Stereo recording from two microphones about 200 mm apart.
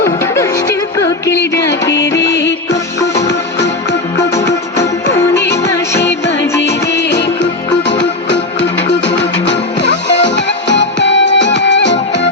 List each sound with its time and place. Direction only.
0.0 s music: 15° left (ahead or behind)
2.3 s music: 60° left (ahead or behind)
6.0 s music: 60° left (ahead or behind)